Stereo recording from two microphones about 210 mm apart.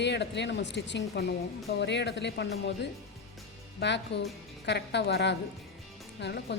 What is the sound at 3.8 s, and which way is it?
Speech, 55° left (ahead or behind).